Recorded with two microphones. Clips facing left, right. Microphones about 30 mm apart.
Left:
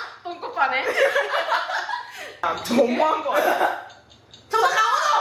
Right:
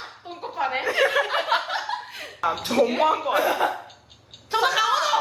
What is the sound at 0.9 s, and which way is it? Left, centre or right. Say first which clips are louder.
Speech: left 1 dB; right.